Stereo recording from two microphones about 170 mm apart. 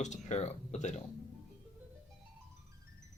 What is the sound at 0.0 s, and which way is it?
Speech, 45° left (ahead or behind).